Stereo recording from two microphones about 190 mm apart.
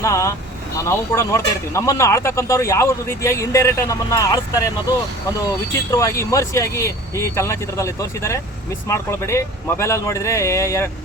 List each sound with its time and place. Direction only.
0.0 s speech: 15° left (ahead or behind)
5.9 s speech: 15° left (ahead or behind)